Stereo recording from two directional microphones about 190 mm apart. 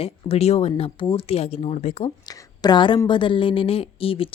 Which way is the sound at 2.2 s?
20° left (ahead or behind).